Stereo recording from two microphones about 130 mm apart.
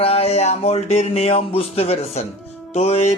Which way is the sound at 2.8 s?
55° left (ahead or behind).